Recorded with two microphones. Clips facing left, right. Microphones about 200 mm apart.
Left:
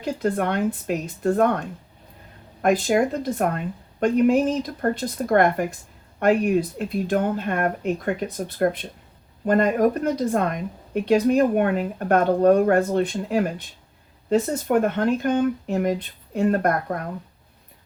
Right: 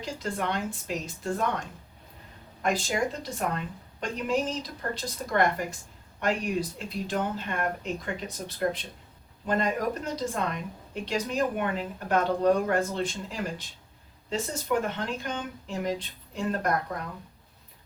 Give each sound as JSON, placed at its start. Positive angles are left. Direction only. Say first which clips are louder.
{"t": 0.0, "sound": "speech", "louder": "left 9 dB", "side_deg": 55}